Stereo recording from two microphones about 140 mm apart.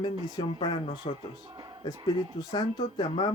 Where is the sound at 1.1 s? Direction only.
45° left (ahead or behind).